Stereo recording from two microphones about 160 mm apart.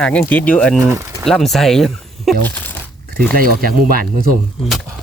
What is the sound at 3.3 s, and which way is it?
Speech, 65° right (ahead or behind).